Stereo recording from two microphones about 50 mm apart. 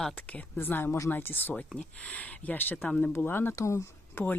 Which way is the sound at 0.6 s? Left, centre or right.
Left.